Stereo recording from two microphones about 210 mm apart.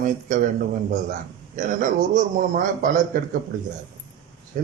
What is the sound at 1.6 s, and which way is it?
A man's voice, 40° right (ahead or behind).